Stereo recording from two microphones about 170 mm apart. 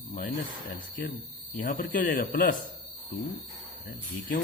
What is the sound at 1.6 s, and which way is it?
Speech, 50° left (ahead or behind).